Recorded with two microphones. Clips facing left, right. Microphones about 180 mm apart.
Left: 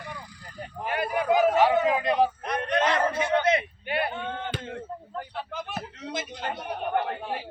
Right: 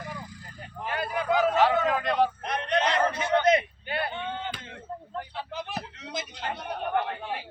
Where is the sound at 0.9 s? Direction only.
15° left (ahead or behind).